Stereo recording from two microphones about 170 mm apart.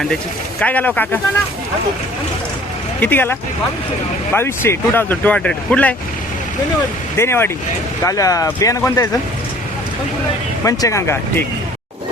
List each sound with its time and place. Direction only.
0.6 s speech: 10° left (ahead or behind)
3.0 s speech: 10° left (ahead or behind)
4.4 s speech: 15° left (ahead or behind)
7.2 s speech: 15° left (ahead or behind)
10.6 s speech: 20° left (ahead or behind)